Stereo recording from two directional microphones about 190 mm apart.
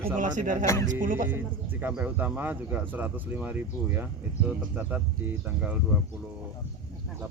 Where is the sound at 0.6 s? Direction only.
15° left (ahead or behind).